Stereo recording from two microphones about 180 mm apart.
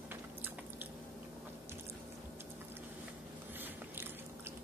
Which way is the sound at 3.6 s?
10° right (ahead or behind).